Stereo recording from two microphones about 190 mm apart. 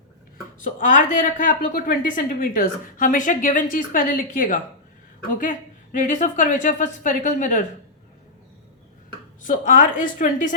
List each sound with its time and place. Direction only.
0.6 s a woman's voice: 45° left (ahead or behind)
9.4 s a woman's voice: 45° left (ahead or behind)